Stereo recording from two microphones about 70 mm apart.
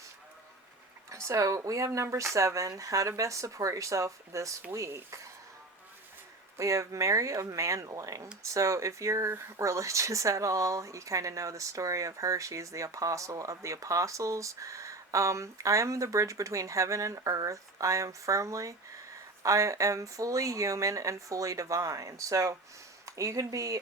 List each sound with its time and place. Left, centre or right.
1.1 s speech: right
6.6 s speech: right